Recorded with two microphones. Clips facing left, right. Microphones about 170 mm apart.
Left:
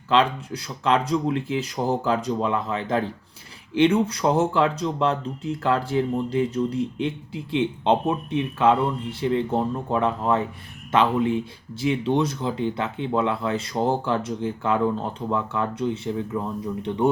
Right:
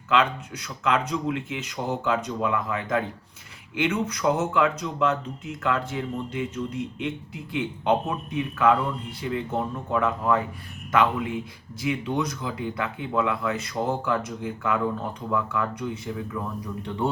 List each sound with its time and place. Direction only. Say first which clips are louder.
0.1 s speech: left 3 dB; 30° left (ahead or behind)